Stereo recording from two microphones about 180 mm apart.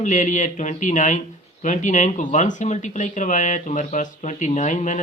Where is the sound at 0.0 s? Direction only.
45° left (ahead or behind).